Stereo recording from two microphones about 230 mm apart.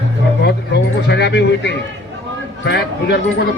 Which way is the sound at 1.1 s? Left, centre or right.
Left.